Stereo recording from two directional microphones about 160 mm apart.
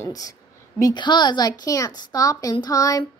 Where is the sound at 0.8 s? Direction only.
25° left (ahead or behind).